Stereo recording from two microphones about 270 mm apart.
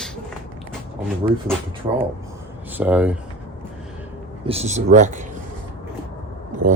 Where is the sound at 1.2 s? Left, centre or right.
Right.